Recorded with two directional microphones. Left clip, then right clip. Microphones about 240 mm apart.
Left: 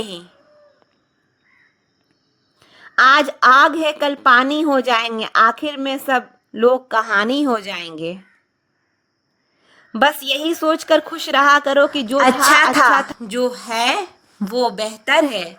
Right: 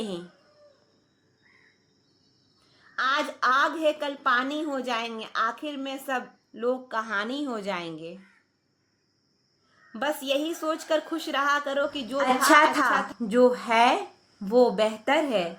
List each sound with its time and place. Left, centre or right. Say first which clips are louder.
2.6 s a woman's voice: left 16 dB; left
7.6 s speech: left 4 dB; centre
7.9 s a woman's voice: left 13 dB; left
9.6 s a woman's voice: left 14 dB; left
13.4 s speech: even; centre
14.4 s speech: left 4 dB; left
14.8 s speech: left 1 dB; centre
15.0 s speech: left 13 dB; left